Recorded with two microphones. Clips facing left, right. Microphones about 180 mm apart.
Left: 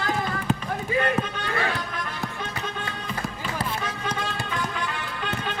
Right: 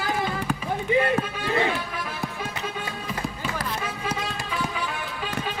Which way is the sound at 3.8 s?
5° right (ahead or behind).